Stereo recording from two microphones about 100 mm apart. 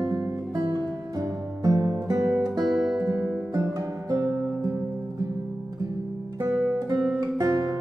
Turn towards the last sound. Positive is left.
turn(degrees=-35)  # may be behind; listen again after turning